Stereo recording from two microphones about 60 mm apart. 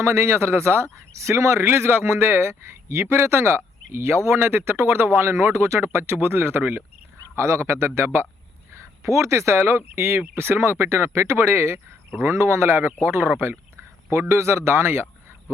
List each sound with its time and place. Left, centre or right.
0.0 s speech: right
1.6 s speech: right
9.0 s speech: right
14.1 s speech: right